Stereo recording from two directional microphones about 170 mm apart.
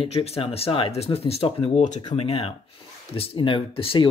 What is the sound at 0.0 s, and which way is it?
Speech, 35° left (ahead or behind).